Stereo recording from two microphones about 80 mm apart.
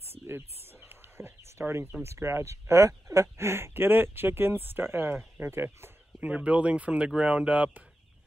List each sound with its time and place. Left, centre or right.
0.3 s a sound: right
2.0 s speech: right
6.2 s speech: centre